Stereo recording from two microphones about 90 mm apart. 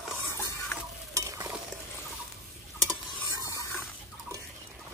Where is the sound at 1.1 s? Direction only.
40° right (ahead or behind).